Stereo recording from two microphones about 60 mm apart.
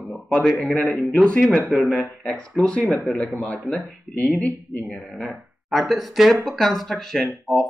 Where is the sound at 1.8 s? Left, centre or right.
Centre.